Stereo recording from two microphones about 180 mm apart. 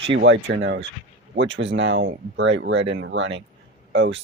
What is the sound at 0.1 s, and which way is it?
Speech, 80° right.